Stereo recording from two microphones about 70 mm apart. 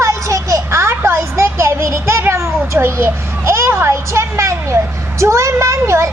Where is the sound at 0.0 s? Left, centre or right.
Right.